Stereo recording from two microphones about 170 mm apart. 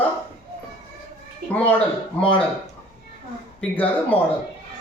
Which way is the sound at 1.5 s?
10° left (ahead or behind).